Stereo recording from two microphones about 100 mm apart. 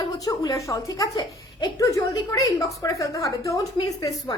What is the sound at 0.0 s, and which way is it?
A woman's voice, 35° left (ahead or behind).